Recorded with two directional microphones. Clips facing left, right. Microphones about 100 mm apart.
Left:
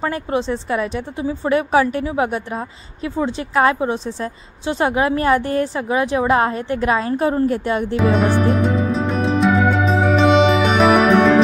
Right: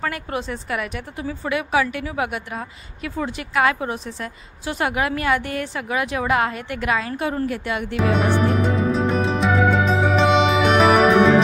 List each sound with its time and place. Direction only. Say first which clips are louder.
0.0 s a woman's voice: left 5 dB; 25° left (ahead or behind)
1.5 s a woman's voice: left 5 dB; 35° left (ahead or behind)
7.9 s music: left 2 dB; centre (ahead or behind)